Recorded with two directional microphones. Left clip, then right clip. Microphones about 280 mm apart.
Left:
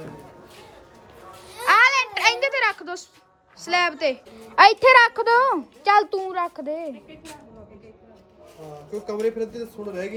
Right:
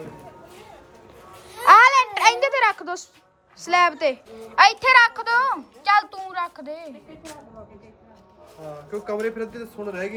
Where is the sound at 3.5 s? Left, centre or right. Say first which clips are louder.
Right 3 dB; centre.